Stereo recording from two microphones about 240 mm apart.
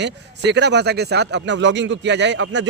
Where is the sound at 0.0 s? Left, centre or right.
Right.